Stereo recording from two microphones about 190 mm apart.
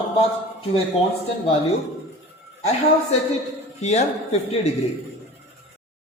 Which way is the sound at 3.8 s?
35° left (ahead or behind).